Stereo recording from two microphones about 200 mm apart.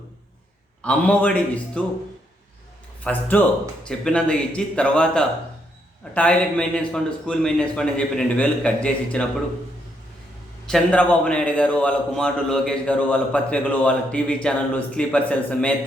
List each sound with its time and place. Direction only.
0.8 s a man's voice: 5° left (ahead or behind)
3.0 s a man's voice: 10° left (ahead or behind)
10.7 s a man's voice: 5° left (ahead or behind)